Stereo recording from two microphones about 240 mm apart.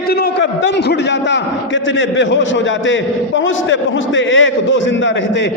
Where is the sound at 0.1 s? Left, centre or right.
Left.